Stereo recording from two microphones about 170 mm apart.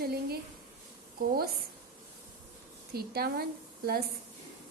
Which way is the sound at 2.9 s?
70° right (ahead or behind).